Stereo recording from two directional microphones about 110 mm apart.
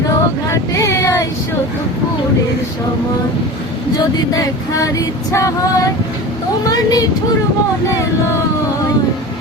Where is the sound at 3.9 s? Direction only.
35° left (ahead or behind).